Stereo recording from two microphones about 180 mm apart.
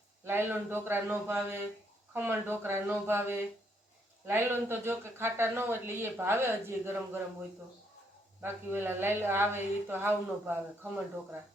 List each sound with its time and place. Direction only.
0.3 s speech: 10° right (ahead or behind)
8.4 s speech: 10° right (ahead or behind)